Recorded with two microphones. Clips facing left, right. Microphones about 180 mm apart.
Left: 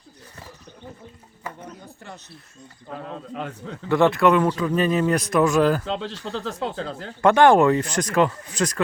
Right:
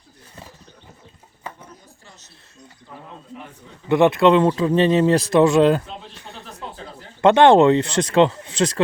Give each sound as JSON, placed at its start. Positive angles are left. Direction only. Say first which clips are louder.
{"t": 2.9, "sound": "speech", "louder": "left 6 dB", "side_deg": 90}
{"t": 3.8, "sound": "speech", "louder": "right 3 dB", "side_deg": -20}
{"t": 5.8, "sound": "speech", "louder": "left 9 dB", "side_deg": 90}
{"t": 7.2, "sound": "speech", "louder": "right 3 dB", "side_deg": -25}